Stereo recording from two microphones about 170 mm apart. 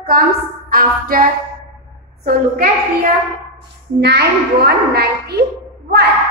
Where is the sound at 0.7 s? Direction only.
60° right (ahead or behind).